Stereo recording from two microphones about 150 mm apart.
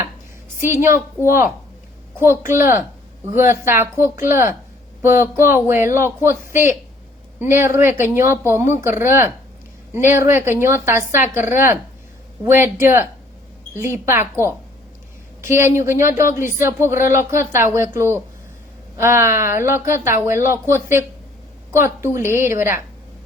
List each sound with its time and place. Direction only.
0.6 s speech: 15° right (ahead or behind)
2.1 s a woman's voice: 15° right (ahead or behind)
13.7 s speech: 20° right (ahead or behind)